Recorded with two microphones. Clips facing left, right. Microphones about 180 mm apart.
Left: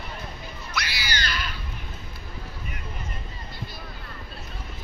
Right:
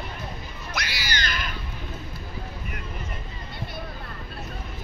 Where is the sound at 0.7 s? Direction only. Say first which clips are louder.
Even; 50° right (ahead or behind).